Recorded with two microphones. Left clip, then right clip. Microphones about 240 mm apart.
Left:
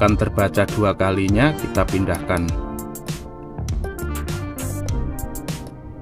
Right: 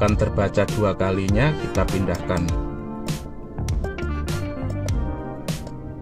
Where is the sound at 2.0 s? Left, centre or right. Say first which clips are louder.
Left 3 dB; left.